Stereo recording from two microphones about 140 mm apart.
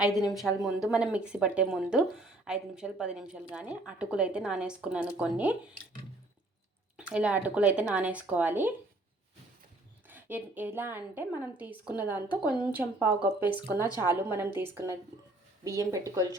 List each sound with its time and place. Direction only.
0.0 s speech: centre (ahead or behind)
6.9 s speech: 10° right (ahead or behind)
10.1 s speech: 15° right (ahead or behind)